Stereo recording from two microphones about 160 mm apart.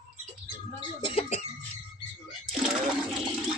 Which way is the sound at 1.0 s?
30° left (ahead or behind).